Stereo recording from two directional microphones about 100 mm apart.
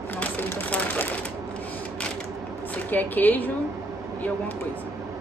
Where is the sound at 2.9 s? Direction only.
20° left (ahead or behind).